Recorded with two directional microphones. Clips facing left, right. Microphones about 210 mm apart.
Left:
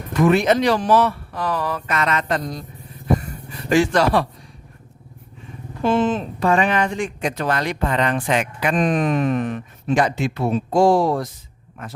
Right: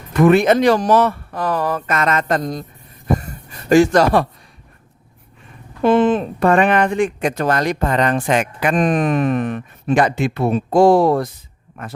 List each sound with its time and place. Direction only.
0.1 s a man's voice: 55° right (ahead or behind)
3.2 s a sound: 45° right (ahead or behind)
5.8 s speech: 60° right (ahead or behind)